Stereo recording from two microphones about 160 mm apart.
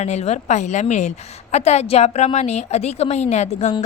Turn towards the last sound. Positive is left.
turn(degrees=45)  # may be behind; listen again after turning